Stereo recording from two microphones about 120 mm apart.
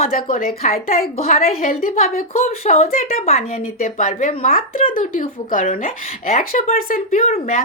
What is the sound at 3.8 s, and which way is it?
A woman's voice, 90° left.